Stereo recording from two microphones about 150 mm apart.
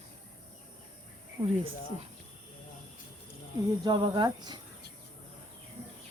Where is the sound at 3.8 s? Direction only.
30° right (ahead or behind).